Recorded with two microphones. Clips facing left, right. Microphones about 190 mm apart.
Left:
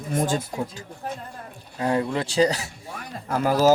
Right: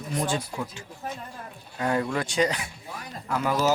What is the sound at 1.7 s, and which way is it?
Speech, 30° left (ahead or behind).